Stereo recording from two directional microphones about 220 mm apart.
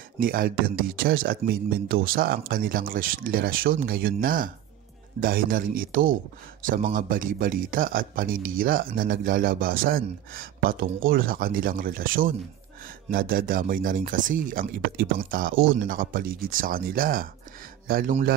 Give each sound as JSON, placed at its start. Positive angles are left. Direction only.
{"t": 0.2, "sound": "speech", "side_deg": -40}